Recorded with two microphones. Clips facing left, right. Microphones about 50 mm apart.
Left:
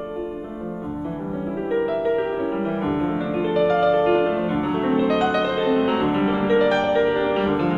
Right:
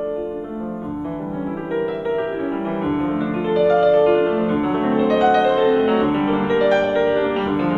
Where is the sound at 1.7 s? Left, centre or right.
Centre.